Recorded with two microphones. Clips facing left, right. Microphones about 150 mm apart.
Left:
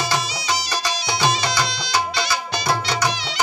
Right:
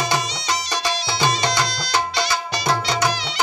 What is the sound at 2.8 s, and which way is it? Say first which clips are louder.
Music: right 1 dB; 25° right (ahead or behind).